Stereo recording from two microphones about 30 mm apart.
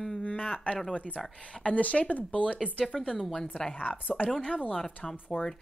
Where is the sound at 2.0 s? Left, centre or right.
Left.